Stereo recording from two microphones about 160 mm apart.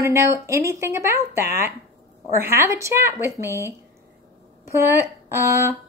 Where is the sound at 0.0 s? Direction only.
20° right (ahead or behind).